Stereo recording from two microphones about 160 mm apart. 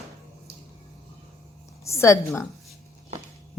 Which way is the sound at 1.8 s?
20° left (ahead or behind).